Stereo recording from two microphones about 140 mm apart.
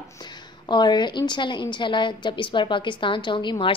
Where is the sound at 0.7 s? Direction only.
30° left (ahead or behind).